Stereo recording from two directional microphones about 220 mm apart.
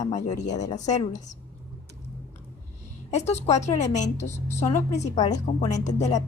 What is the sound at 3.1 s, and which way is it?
Speech, 30° left (ahead or behind).